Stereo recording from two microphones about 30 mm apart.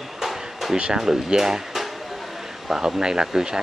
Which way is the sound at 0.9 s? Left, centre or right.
Right.